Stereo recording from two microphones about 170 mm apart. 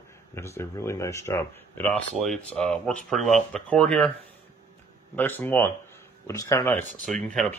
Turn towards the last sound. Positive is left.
turn(degrees=5)  # may be behind; listen again after turning